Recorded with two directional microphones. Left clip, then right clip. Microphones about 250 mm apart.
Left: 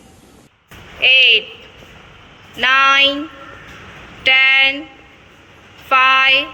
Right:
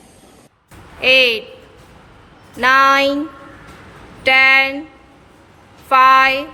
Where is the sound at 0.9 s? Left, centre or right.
Centre.